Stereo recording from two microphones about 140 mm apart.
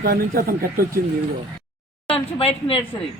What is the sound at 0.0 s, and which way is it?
Speech, 90° right.